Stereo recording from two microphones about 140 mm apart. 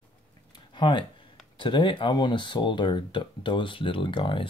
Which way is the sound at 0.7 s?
35° left (ahead or behind).